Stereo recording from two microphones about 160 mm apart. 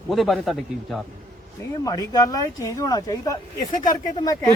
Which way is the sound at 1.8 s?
20° left (ahead or behind).